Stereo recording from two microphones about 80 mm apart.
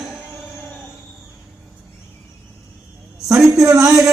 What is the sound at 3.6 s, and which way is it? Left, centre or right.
Speech, right.